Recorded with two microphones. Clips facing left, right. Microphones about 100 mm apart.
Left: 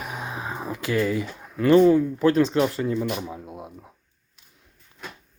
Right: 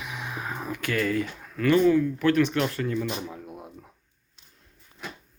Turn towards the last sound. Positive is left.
turn(degrees=20)  # may be behind; listen again after turning